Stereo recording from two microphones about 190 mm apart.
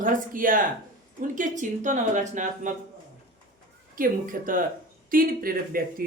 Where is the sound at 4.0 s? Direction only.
45° right (ahead or behind).